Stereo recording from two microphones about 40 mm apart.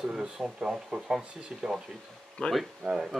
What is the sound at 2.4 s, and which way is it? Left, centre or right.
Speech, left.